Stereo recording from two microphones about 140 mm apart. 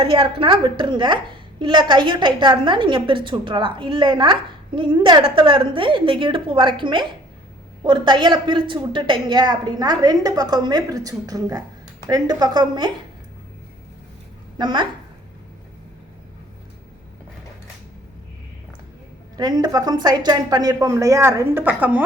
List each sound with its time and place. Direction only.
0.0 s a woman's voice: 40° right (ahead or behind)
14.6 s a woman's voice: 30° right (ahead or behind)
19.4 s a woman's voice: 30° right (ahead or behind); by 22.0 s 10° right (ahead or behind)